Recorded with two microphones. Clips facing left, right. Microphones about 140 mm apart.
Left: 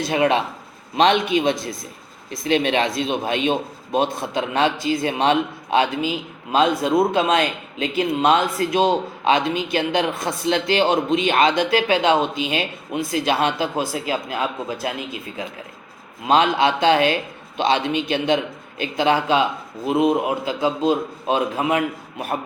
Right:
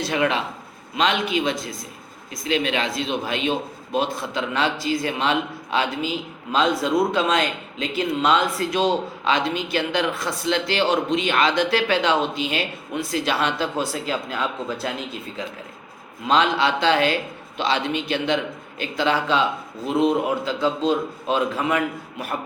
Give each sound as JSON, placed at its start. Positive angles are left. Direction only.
{"t": 0.1, "sound": "a man's voice", "side_deg": 25}
{"t": 16.2, "sound": "a man's voice", "side_deg": 20}